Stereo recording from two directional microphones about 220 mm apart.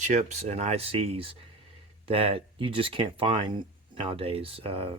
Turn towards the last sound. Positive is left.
turn(degrees=-25)  # may be behind; listen again after turning